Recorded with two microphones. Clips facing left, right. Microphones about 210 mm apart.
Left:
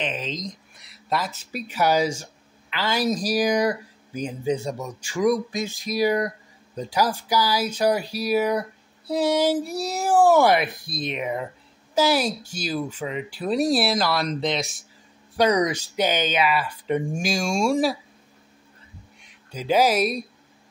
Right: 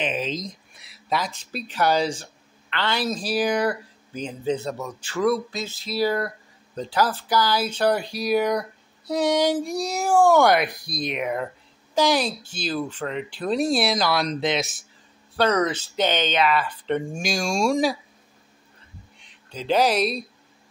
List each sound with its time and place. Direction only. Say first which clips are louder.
0.0 s speech: right 2 dB; 10° right (ahead or behind)
15.3 s speech: left 1 dB; 15° left (ahead or behind)
19.5 s speech: left 1 dB; 10° left (ahead or behind)